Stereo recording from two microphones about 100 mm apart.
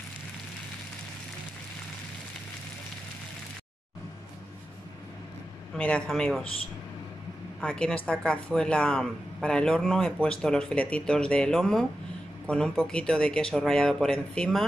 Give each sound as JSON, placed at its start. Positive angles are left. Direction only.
{"t": 5.8, "sound": "a man's voice", "side_deg": 10}
{"t": 7.6, "sound": "speech", "side_deg": 10}